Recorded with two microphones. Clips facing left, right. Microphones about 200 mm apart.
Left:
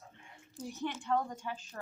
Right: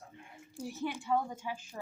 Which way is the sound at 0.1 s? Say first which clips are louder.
Right 5 dB; 10° right (ahead or behind).